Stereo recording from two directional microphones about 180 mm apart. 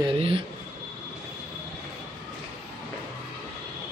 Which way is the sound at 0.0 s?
30° right (ahead or behind).